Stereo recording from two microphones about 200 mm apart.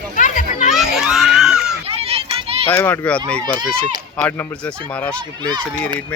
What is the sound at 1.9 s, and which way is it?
Children playing, 30° right (ahead or behind).